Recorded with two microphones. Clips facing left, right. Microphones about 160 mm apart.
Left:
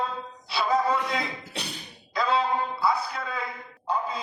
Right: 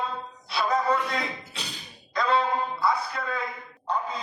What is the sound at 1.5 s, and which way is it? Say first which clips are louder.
Thump: left 3 dB; 65° left (ahead or behind).